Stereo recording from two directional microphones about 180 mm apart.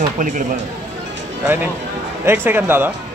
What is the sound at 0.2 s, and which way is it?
Speech, 45° right (ahead or behind).